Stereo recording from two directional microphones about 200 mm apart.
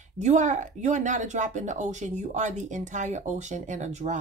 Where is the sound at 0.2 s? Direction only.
35° right (ahead or behind).